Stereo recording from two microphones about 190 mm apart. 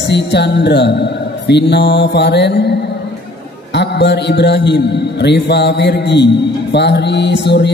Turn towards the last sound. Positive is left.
turn(degrees=65)  # may be behind; listen again after turning